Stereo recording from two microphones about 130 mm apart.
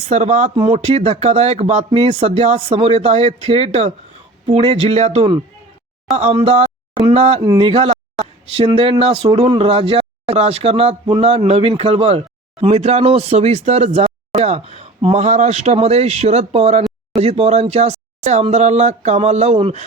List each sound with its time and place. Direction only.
0.1 s speech: 55° right (ahead or behind)
6.1 s a sound: 50° right (ahead or behind)
7.0 s speech: 50° right (ahead or behind)